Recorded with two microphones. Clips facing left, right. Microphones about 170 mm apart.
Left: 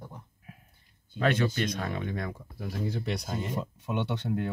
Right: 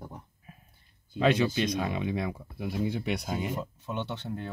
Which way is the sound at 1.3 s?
10° right (ahead or behind).